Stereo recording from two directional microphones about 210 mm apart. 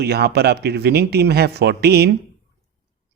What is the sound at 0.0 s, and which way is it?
Speech, 50° right (ahead or behind).